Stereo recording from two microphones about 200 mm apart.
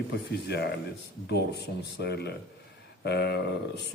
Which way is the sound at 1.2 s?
55° left (ahead or behind).